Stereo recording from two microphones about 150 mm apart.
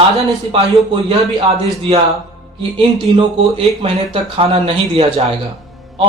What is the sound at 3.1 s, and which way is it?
A man's voice, 35° right (ahead or behind).